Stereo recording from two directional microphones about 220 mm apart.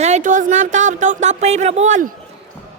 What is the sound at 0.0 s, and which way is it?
Speech, 35° right (ahead or behind).